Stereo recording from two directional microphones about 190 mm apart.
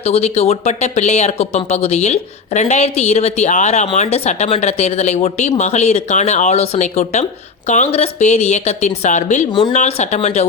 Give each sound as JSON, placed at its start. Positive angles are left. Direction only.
{"t": 0.0, "sound": "speech", "side_deg": 35}